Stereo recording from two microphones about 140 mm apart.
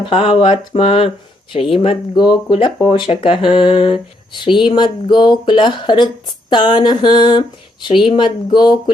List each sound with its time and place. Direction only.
0.0 s speech: 40° left (ahead or behind)